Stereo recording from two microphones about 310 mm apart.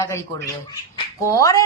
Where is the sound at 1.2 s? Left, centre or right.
Centre.